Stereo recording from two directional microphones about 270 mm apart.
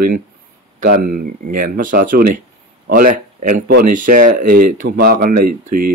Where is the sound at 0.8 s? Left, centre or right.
Right.